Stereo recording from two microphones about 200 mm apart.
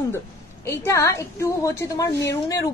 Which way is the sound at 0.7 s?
15° left (ahead or behind).